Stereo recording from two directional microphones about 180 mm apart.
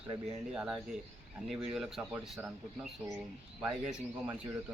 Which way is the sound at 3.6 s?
5° right (ahead or behind).